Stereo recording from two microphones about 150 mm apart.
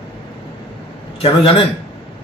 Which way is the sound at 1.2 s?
40° left (ahead or behind).